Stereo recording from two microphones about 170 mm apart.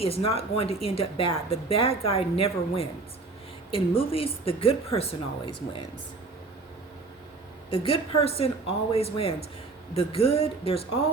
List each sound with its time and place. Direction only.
0.0 s a woman's voice: 35° left (ahead or behind)
7.7 s a woman's voice: 35° left (ahead or behind)